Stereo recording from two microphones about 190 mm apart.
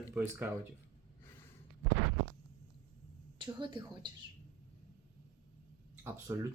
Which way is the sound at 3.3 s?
25° right (ahead or behind).